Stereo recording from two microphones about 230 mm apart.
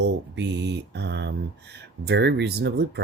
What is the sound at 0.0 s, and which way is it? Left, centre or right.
Speech, right.